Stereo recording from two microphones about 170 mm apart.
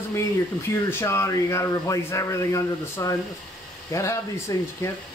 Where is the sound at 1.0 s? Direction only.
15° left (ahead or behind).